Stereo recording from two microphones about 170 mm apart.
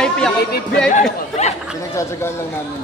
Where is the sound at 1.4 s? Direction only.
40° left (ahead or behind).